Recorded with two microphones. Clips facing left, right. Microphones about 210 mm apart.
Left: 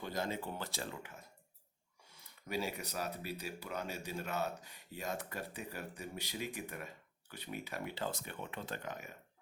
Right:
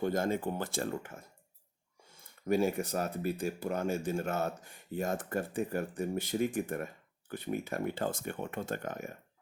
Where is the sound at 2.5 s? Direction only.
50° right (ahead or behind).